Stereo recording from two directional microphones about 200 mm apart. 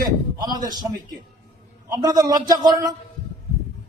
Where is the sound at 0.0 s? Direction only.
20° right (ahead or behind).